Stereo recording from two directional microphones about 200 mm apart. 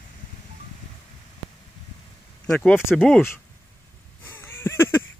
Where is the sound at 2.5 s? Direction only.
5° left (ahead or behind).